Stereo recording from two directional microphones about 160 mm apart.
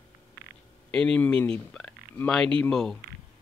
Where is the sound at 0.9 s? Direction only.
5° left (ahead or behind).